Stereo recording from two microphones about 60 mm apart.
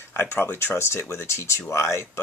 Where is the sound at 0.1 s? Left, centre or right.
Left.